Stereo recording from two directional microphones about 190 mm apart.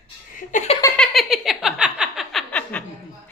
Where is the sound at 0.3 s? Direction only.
40° left (ahead or behind).